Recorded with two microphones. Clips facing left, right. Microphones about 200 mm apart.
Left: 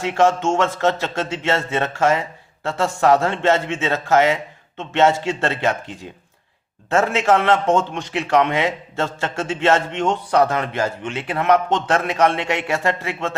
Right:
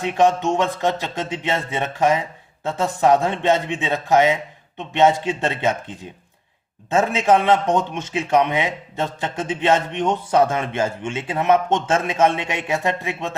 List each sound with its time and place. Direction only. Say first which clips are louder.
0.0 s a man's voice: even; 15° right (ahead or behind)